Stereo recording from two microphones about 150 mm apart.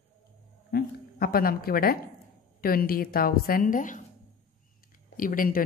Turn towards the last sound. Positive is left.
turn(degrees=70)  # may be behind; listen again after turning